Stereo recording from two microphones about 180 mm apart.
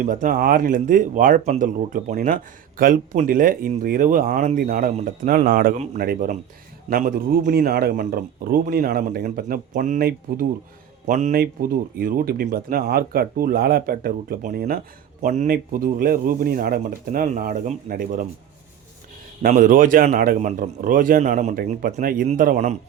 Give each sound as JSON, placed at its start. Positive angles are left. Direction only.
{"t": 0.0, "sound": "speech", "side_deg": -45}
{"t": 11.0, "sound": "speech", "side_deg": -45}
{"t": 15.2, "sound": "speech", "side_deg": -45}
{"t": 19.4, "sound": "speech", "side_deg": -50}